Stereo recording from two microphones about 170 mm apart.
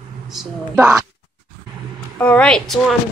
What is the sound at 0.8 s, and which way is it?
Speech, 15° right (ahead or behind).